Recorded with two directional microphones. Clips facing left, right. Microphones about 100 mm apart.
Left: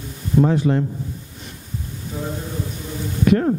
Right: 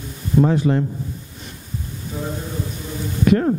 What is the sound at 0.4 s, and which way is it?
Speech, 20° right (ahead or behind).